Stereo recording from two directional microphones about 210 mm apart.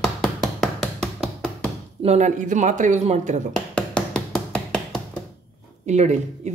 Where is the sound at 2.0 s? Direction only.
35° right (ahead or behind).